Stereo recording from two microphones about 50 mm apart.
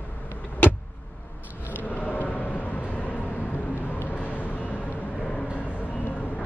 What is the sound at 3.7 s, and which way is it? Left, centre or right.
Vehicle, left.